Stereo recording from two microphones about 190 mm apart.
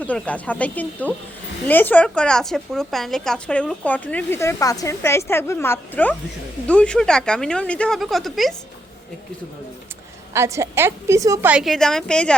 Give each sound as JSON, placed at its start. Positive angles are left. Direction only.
{"t": 0.0, "sound": "a woman's voice", "side_deg": 5}
{"t": 10.3, "sound": "a woman's voice", "side_deg": -15}